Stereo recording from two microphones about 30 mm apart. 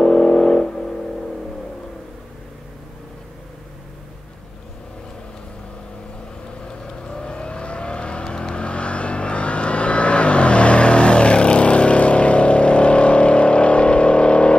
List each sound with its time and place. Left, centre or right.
0.0 s vehicle: left
6.8 s vehicle: left